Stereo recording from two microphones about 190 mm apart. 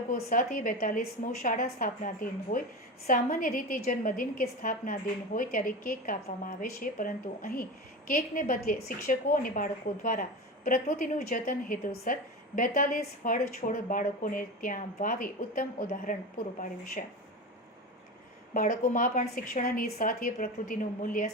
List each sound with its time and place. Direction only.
0.1 s a woman's voice: 45° left (ahead or behind)
18.5 s a woman's voice: 45° left (ahead or behind)